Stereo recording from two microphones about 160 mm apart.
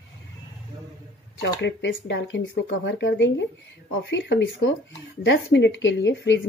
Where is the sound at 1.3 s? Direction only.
90° left.